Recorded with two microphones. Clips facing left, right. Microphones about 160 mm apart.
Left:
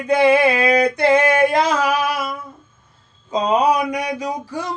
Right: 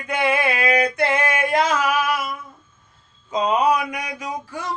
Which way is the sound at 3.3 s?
35° left (ahead or behind).